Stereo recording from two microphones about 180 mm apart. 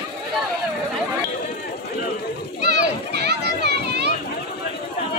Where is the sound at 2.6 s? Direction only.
65° right (ahead or behind).